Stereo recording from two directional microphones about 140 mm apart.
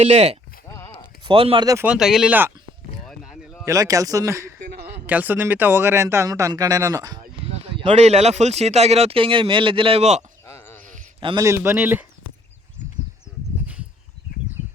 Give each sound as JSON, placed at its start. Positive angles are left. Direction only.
{"t": 0.0, "sound": "speech", "side_deg": -50}
{"t": 1.2, "sound": "speech", "side_deg": -40}
{"t": 1.8, "sound": "speech", "side_deg": -5}
{"t": 3.1, "sound": "boat", "side_deg": 0}
{"t": 3.7, "sound": "speech", "side_deg": -25}
{"t": 7.4, "sound": "speech", "side_deg": -40}
{"t": 10.4, "sound": "a sound", "side_deg": 20}
{"t": 11.3, "sound": "speech", "side_deg": -20}